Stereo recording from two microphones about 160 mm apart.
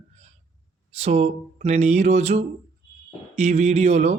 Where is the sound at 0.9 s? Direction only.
40° right (ahead or behind).